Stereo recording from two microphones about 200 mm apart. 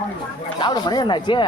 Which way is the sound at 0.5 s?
20° left (ahead or behind).